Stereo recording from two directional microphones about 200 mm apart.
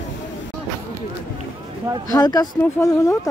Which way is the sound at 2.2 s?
20° left (ahead or behind).